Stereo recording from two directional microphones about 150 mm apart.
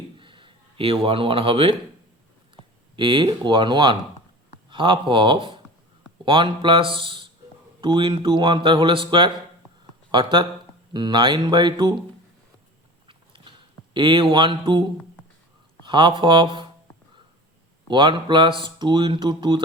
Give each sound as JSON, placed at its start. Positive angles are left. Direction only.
{"t": 0.2, "sound": "a sound", "side_deg": -35}
{"t": 2.9, "sound": "speech", "side_deg": -30}
{"t": 13.1, "sound": "biting", "side_deg": -35}
{"t": 13.9, "sound": "speech", "side_deg": -35}
{"t": 17.8, "sound": "speech", "side_deg": -30}